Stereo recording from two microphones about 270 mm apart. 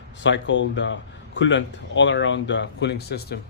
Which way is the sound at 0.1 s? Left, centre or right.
Left.